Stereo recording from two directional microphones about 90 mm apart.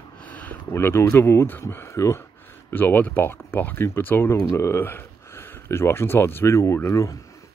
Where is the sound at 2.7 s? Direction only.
20° left (ahead or behind).